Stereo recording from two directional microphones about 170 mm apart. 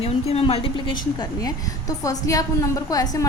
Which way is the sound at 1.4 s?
20° left (ahead or behind).